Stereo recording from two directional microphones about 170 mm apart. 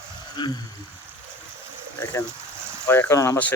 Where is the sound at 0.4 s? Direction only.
25° left (ahead or behind).